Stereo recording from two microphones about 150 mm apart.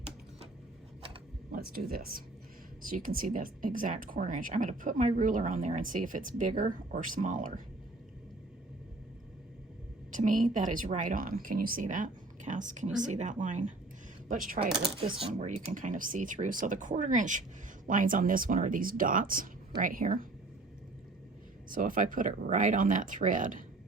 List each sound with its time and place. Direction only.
1.5 s speech: 75° right (ahead or behind)
2.8 s speech: 65° right (ahead or behind)
10.1 s speech: 60° right (ahead or behind)
14.3 s speech: 65° right (ahead or behind)
15.3 s speech: 55° right (ahead or behind)
21.7 s speech: 65° right (ahead or behind)